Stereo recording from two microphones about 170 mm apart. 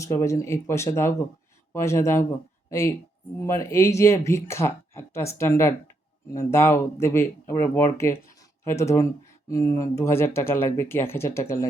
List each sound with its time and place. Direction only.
0.0 s speech: 15° left (ahead or behind)